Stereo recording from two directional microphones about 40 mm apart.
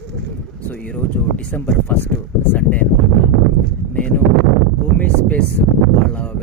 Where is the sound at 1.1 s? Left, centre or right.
Left.